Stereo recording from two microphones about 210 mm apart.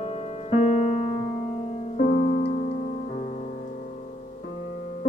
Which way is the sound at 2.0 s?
40° left (ahead or behind).